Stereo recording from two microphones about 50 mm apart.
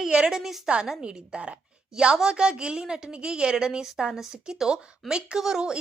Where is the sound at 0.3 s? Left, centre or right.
Centre.